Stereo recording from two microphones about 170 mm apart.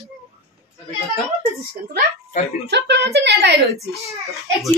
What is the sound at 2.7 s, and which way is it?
Speech, 85° right.